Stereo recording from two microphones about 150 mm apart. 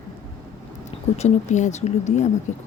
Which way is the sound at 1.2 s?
50° left (ahead or behind).